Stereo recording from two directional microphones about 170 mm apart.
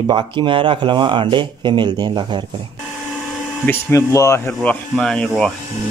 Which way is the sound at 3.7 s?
15° left (ahead or behind).